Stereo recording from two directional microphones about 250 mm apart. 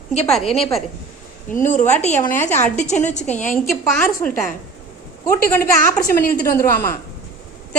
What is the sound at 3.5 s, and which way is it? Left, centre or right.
Speech, centre.